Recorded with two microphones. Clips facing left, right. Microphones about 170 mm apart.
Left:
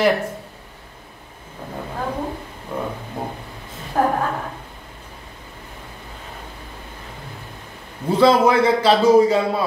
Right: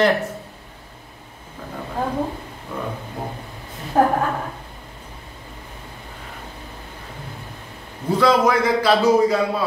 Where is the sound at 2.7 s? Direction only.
25° left (ahead or behind).